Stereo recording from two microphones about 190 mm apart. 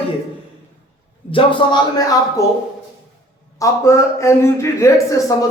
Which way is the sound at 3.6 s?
15° left (ahead or behind).